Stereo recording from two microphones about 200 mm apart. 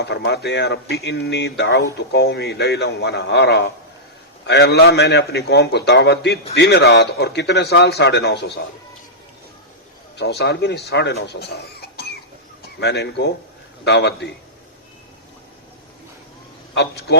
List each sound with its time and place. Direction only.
0.0 s speech: 55° left (ahead or behind)
10.2 s speech: 55° left (ahead or behind)
16.7 s speech: 60° left (ahead or behind)